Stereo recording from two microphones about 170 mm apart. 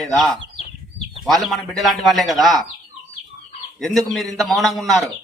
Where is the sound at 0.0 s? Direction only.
Centre (ahead or behind).